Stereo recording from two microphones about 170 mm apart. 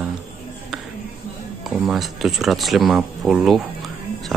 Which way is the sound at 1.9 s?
Centre (ahead or behind).